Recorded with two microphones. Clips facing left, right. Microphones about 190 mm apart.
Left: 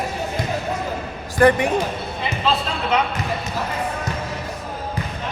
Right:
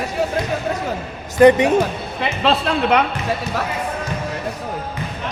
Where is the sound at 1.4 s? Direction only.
20° right (ahead or behind).